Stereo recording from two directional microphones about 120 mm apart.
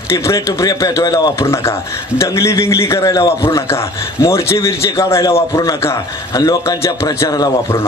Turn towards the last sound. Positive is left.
turn(degrees=30)  # may be behind; listen again after turning